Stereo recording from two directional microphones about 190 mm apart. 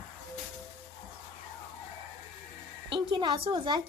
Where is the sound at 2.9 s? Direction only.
25° right (ahead or behind).